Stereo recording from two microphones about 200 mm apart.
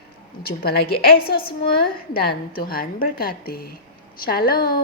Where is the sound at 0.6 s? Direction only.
50° left (ahead or behind).